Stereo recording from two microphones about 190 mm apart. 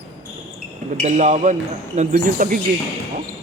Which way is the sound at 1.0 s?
40° right (ahead or behind).